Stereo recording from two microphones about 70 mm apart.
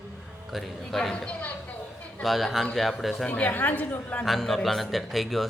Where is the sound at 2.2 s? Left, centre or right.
Centre.